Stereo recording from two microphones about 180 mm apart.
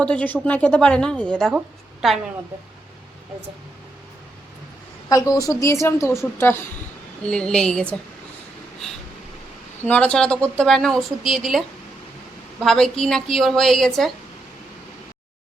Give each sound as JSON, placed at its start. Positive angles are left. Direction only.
{"t": 0.0, "sound": "a woman's voice", "side_deg": 5}
{"t": 5.0, "sound": "a woman's voice", "side_deg": 20}
{"t": 7.3, "sound": "a woman's voice", "side_deg": 5}
{"t": 9.8, "sound": "a woman's voice", "side_deg": 10}
{"t": 12.6, "sound": "a woman's voice", "side_deg": 5}